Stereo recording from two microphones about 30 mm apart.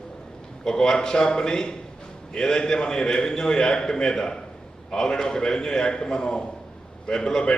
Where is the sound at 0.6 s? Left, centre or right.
Centre.